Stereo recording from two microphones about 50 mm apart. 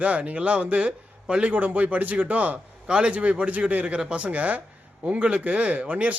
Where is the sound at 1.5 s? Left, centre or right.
Right.